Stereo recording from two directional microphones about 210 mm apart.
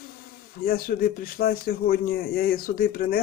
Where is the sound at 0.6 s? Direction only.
45° left (ahead or behind).